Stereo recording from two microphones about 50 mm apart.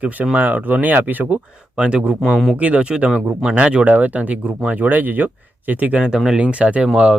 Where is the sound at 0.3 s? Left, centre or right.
Right.